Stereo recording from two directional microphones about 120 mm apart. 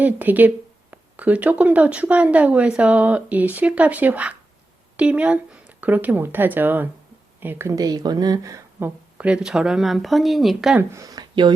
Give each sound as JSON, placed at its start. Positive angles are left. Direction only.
{"t": 0.0, "sound": "speech", "side_deg": -15}
{"t": 8.8, "sound": "speech", "side_deg": -10}
{"t": 10.8, "sound": "speech", "side_deg": -25}